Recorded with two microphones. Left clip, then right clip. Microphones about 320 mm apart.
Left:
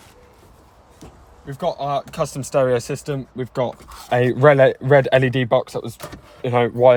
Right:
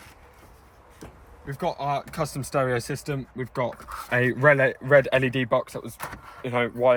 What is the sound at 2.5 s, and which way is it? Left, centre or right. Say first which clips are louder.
Speech: left 7 dB; centre.